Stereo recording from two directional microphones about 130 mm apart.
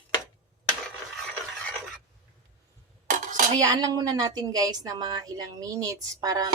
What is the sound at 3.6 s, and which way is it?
A woman's voice, 30° right (ahead or behind).